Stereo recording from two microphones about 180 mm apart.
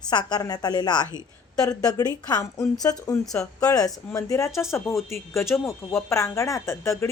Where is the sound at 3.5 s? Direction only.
20° left (ahead or behind).